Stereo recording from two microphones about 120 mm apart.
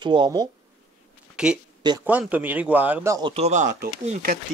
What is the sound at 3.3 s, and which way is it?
Speech, 70° right (ahead or behind).